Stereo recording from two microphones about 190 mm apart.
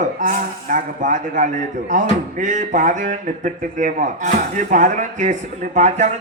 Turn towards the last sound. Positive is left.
turn(degrees=-40)  # may be behind; listen again after turning